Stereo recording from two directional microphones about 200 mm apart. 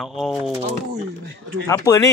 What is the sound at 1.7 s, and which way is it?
Speech, 15° left (ahead or behind).